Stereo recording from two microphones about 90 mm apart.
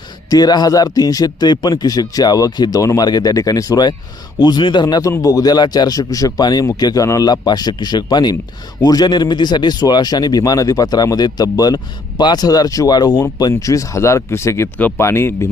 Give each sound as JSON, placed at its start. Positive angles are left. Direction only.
{"t": 0.3, "sound": "speech", "side_deg": 50}
{"t": 4.4, "sound": "speech", "side_deg": 60}
{"t": 13.5, "sound": "speech", "side_deg": 40}
{"t": 14.8, "sound": "speech", "side_deg": 20}